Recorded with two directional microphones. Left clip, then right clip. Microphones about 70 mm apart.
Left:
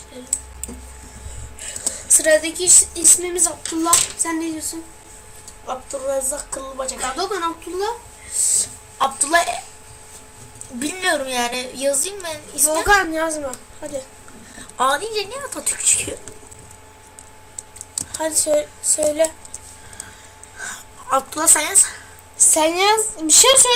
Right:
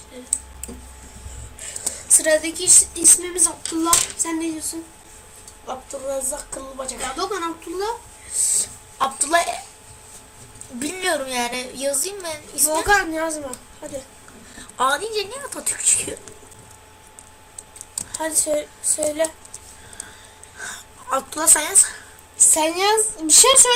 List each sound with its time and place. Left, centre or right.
1.8 s a woman's voice: centre
3.6 s speech: centre
5.6 s a woman's voice: centre
7.0 s speech: centre
9.1 s a woman's voice: centre
10.8 s a woman's voice: right
12.8 s speech: centre
14.5 s a woman's voice: right
17.9 s speech: left
20.6 s a sound: centre
22.5 s speech: centre